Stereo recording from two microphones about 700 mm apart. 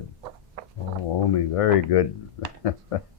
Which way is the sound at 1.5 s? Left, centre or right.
Left.